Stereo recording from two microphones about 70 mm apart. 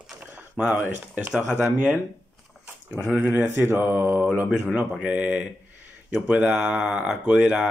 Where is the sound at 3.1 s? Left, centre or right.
Right.